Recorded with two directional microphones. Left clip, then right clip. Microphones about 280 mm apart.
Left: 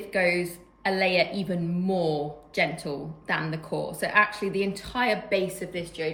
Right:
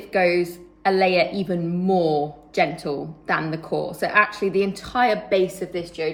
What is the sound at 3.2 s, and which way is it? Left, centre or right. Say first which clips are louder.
Speech: right 5 dB; centre.